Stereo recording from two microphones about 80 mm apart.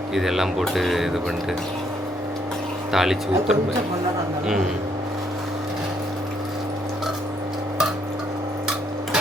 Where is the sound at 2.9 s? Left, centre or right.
Centre.